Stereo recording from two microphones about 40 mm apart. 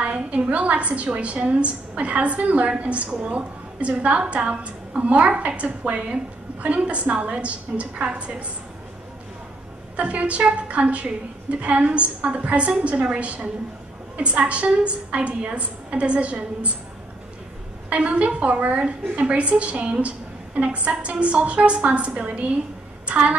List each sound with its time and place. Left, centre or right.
0.0 s a sound: right
0.4 s a woman's voice: right
9.9 s a woman's voice: right
17.8 s a woman's voice: right